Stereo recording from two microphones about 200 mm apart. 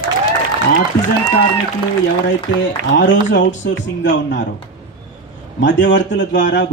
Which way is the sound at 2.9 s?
65° left (ahead or behind).